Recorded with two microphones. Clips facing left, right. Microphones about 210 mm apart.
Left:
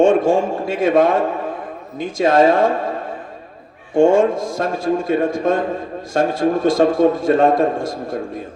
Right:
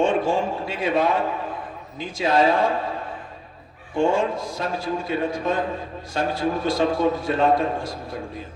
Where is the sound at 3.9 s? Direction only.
45° left (ahead or behind).